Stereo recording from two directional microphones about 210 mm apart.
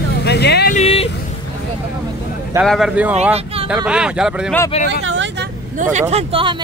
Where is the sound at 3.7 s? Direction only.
5° right (ahead or behind).